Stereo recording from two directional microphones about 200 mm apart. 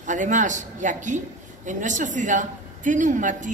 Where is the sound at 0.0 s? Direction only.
40° right (ahead or behind).